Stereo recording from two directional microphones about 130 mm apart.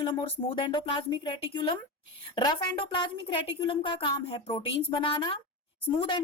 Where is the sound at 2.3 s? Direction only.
40° left (ahead or behind).